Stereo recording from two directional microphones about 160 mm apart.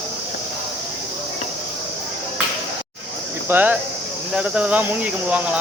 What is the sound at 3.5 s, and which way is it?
Speech, 10° right (ahead or behind).